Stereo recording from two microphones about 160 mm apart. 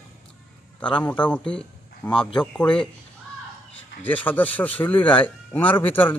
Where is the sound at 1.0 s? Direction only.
10° left (ahead or behind).